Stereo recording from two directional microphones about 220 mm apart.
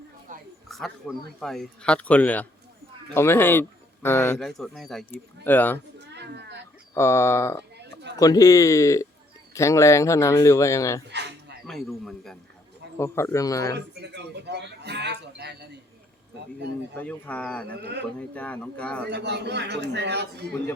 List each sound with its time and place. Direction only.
0.3 s a sound: 35° right (ahead or behind)
0.7 s speech: centre (ahead or behind)
6.0 s cat: 50° right (ahead or behind)
6.9 s speech: 10° left (ahead or behind)
7.8 s a sound: 50° right (ahead or behind)
8.2 s speech: 15° left (ahead or behind)
11.1 s a sound: 50° right (ahead or behind)
11.6 s speech: centre (ahead or behind)
13.0 s speech: 10° left (ahead or behind)
13.7 s speech: 50° right (ahead or behind)
17.0 s speech: 5° left (ahead or behind)
19.1 s speech: 50° right (ahead or behind)